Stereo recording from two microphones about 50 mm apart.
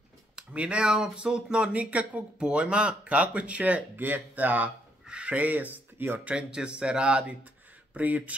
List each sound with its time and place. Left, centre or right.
0.5 s speech: right
3.9 s speech: right
5.0 s speech: right
6.3 s speech: centre